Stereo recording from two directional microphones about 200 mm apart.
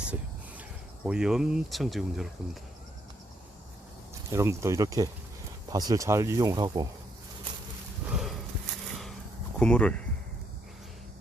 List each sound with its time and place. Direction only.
0.0 s a sound: 5° right (ahead or behind)
1.0 s speech: 5° right (ahead or behind)
4.3 s speech: 15° right (ahead or behind)
8.1 s horse: centre (ahead or behind)
9.6 s speech: 5° left (ahead or behind)